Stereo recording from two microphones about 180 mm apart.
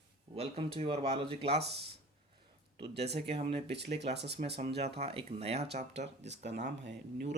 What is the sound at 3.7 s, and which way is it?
Speech, 70° right (ahead or behind).